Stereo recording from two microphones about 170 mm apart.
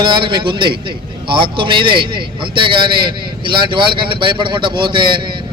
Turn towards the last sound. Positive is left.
turn(degrees=-30)  # may be behind; listen again after turning